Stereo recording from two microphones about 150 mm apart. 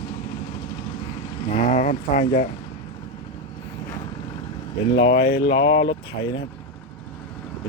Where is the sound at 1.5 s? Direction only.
55° left (ahead or behind).